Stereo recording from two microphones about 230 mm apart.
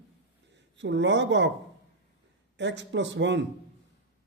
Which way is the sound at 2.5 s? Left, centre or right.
Right.